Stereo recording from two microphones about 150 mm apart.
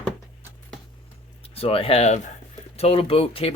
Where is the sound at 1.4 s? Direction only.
40° left (ahead or behind).